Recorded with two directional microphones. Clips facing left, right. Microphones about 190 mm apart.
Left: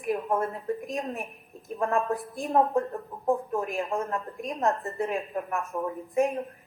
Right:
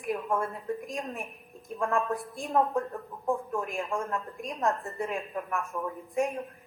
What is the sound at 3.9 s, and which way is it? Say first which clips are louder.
Speech: left 2 dB; 20° left (ahead or behind).